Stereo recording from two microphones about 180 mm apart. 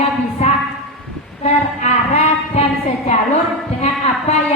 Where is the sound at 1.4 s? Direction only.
35° left (ahead or behind).